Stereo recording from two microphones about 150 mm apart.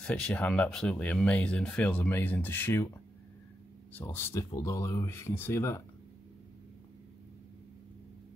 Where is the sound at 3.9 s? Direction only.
15° left (ahead or behind).